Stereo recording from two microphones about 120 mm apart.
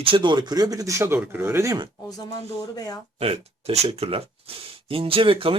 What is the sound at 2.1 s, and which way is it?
Speech, 30° left (ahead or behind).